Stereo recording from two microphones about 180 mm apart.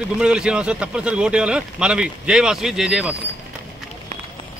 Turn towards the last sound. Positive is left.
turn(degrees=-5)  # may be behind; listen again after turning